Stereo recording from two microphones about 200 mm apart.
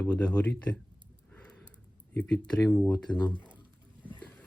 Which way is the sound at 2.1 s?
5° left (ahead or behind).